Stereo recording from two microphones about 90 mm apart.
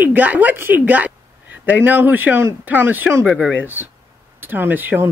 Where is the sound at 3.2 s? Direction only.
10° right (ahead or behind).